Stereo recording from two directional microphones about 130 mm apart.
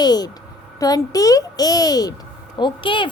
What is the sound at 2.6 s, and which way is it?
Speech, 40° left (ahead or behind).